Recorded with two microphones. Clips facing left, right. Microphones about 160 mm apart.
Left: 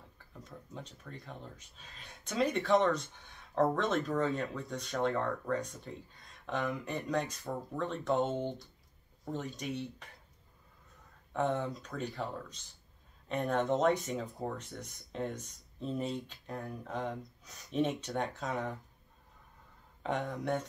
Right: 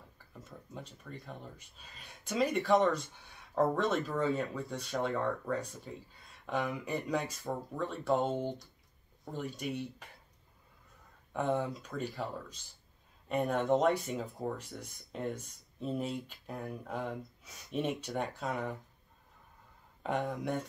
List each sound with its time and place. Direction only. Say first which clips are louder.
0.5 s speech: even; 5° right (ahead or behind)
11.3 s speech: even; 10° right (ahead or behind)
20.0 s speech: right 1 dB; 5° right (ahead or behind)